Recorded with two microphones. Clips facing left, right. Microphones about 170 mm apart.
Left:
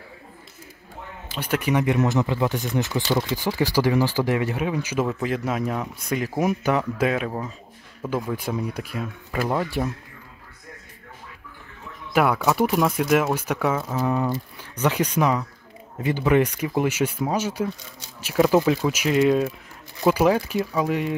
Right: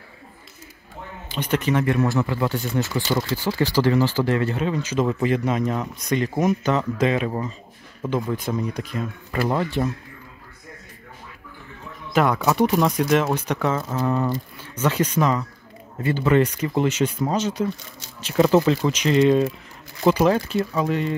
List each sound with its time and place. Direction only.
1.3 s speech: 10° left (ahead or behind)
12.1 s speech: 10° left (ahead or behind)